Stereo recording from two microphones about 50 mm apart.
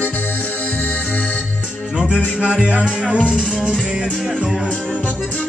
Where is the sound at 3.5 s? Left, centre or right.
Centre.